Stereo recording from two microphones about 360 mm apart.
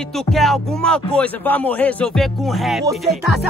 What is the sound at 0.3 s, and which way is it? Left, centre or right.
Music, centre.